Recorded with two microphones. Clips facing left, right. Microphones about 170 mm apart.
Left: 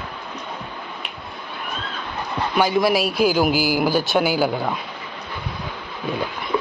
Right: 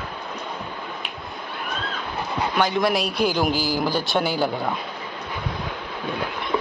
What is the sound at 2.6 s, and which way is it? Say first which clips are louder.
Speech: left 4 dB; 5° left (ahead or behind).